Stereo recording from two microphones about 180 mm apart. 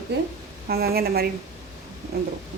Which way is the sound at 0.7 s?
60° right (ahead or behind).